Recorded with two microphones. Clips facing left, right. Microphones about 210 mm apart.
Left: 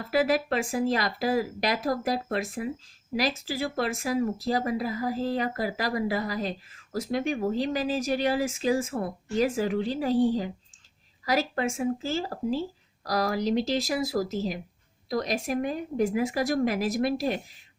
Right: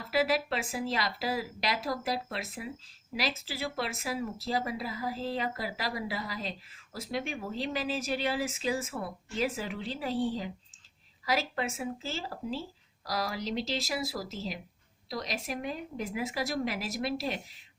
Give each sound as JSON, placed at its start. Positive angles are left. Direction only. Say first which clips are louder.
{"t": 0.1, "sound": "speech", "louder": "left 4 dB", "side_deg": 45}
{"t": 11.3, "sound": "speech", "louder": "left 5 dB", "side_deg": 45}